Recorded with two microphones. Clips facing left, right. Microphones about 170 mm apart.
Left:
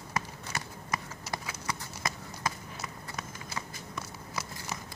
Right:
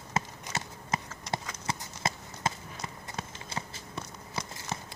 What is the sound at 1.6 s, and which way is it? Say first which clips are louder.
Run: right 2 dB; 25° right (ahead or behind).